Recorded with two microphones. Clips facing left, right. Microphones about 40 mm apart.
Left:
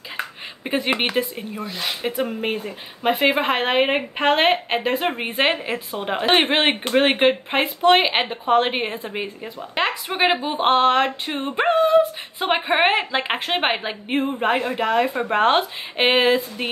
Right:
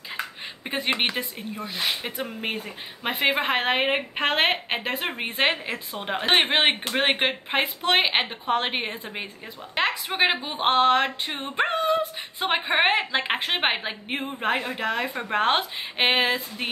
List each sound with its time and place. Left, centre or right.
0.9 s speech: centre
1.6 s speech: centre
2.4 s speech: centre